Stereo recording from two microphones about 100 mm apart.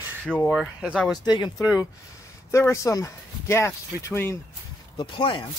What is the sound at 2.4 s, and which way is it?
Speech, 30° left (ahead or behind).